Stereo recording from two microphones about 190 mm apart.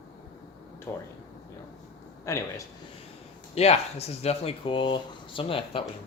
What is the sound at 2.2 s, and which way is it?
Speech, 15° left (ahead or behind).